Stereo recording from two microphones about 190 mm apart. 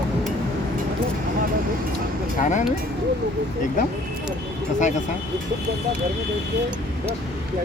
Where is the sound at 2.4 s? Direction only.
40° left (ahead or behind).